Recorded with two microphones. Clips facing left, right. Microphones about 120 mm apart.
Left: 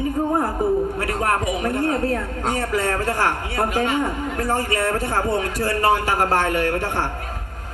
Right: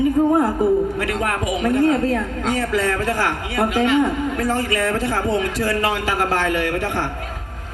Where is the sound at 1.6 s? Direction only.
35° left (ahead or behind).